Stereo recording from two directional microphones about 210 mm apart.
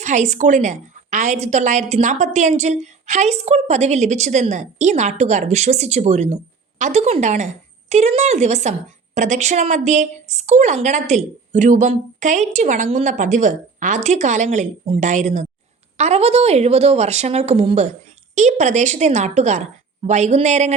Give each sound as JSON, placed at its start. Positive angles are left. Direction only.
{"t": 0.0, "sound": "a woman's voice", "side_deg": -35}